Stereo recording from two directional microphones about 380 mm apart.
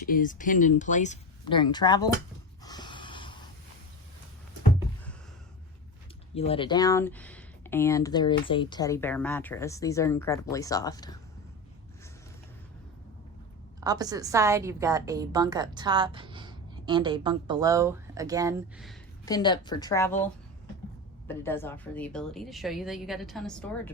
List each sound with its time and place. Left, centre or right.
0.0 s speech: left
2.6 s snort: centre
6.3 s speech: centre
13.8 s a woman's voice: centre
21.2 s a woman's voice: centre